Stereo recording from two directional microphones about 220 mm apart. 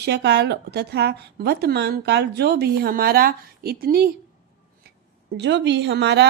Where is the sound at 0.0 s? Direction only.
50° right (ahead or behind).